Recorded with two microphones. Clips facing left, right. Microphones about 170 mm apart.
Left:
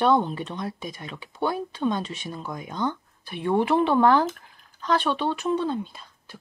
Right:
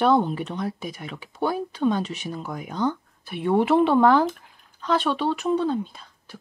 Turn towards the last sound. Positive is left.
turn(degrees=-5)  # may be behind; listen again after turning